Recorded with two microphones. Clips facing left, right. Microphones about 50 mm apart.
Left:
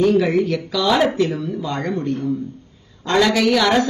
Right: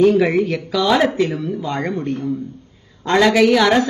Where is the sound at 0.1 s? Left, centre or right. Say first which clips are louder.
Right 1 dB; right.